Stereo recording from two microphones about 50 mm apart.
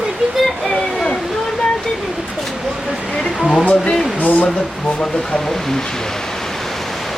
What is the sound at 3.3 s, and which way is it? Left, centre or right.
Speech, centre.